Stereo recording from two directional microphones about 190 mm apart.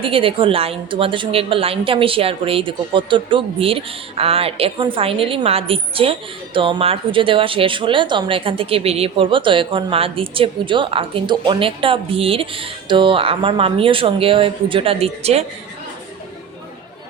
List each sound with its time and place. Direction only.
0.0 s a woman's voice: 30° right (ahead or behind)